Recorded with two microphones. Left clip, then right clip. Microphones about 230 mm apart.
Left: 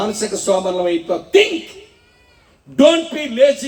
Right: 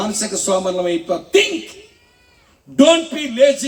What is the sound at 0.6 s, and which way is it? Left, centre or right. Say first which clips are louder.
Speech: left 1 dB; right.